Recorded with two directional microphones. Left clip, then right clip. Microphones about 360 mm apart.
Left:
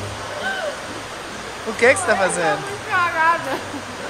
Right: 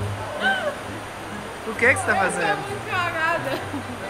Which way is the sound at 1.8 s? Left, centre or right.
Centre.